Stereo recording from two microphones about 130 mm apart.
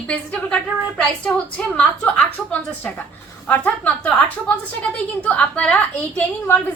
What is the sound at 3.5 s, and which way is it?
Speech, 10° left (ahead or behind).